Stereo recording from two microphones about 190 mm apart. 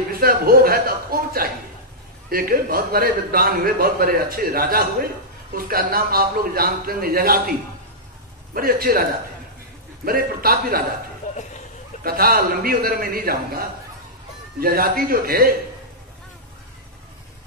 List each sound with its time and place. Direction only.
0.1 s a sound: 50° right (ahead or behind)
2.2 s a man's voice: 50° right (ahead or behind)
8.5 s a man's voice: 50° right (ahead or behind)
10.0 s a man's voice: 50° right (ahead or behind)
12.0 s a man's voice: 50° right (ahead or behind)